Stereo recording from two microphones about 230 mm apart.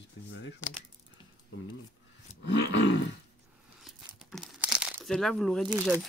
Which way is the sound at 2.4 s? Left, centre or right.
Left.